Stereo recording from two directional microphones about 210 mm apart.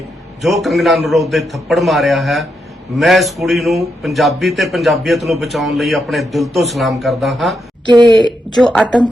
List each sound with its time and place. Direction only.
0.4 s a man's voice: centre (ahead or behind)
7.9 s speech: 20° right (ahead or behind)
8.2 s a man's voice: 5° left (ahead or behind)